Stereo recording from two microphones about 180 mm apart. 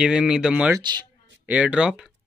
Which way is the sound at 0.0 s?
5° right (ahead or behind).